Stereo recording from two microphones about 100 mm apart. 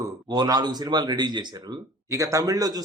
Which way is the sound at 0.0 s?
40° right (ahead or behind).